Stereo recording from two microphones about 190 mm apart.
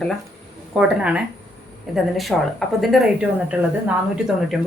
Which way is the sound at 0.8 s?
5° right (ahead or behind).